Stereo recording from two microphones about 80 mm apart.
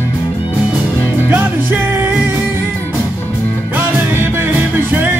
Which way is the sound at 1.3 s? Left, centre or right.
Right.